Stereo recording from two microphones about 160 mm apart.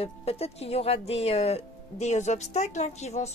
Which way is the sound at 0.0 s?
40° left (ahead or behind).